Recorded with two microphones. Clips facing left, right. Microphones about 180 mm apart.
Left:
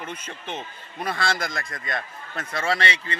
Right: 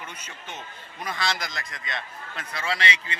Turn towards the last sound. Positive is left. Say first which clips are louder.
# left 2 dB
turn(degrees=30)  # may be behind; listen again after turning